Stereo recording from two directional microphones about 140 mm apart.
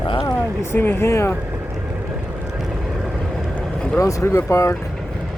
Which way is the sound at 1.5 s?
10° right (ahead or behind).